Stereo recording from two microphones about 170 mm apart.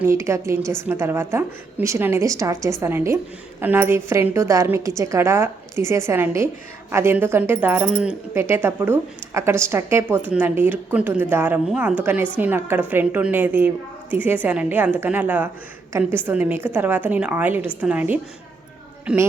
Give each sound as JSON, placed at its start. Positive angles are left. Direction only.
{"t": 0.0, "sound": "a woman's voice", "side_deg": -15}